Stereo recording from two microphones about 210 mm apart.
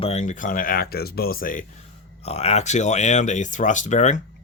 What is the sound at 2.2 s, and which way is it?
Speech, 30° left (ahead or behind).